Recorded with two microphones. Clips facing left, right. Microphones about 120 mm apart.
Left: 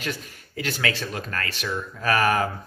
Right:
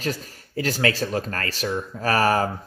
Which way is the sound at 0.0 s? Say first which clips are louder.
Right 4 dB; 40° right (ahead or behind).